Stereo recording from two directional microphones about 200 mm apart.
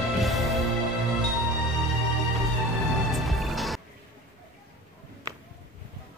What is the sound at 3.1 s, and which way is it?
Music, centre (ahead or behind).